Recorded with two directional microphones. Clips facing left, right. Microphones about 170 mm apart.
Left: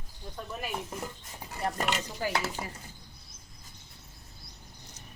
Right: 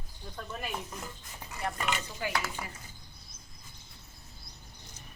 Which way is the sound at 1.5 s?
35° left (ahead or behind).